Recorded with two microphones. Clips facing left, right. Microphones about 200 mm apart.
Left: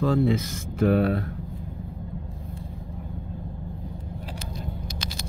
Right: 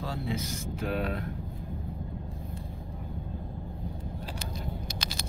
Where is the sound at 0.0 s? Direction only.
55° left (ahead or behind).